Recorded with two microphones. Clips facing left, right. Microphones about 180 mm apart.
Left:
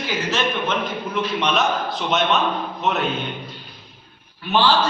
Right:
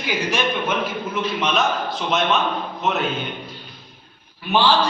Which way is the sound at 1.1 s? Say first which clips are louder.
Left 2 dB; centre (ahead or behind).